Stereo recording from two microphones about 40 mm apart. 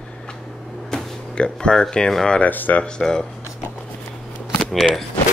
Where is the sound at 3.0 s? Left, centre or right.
Centre.